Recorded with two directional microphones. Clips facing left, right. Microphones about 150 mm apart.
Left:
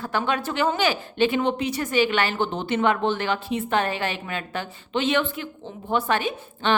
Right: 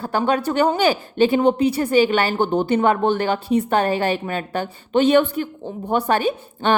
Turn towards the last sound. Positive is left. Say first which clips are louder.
# right 5 dB
turn(degrees=-45)  # may be behind; listen again after turning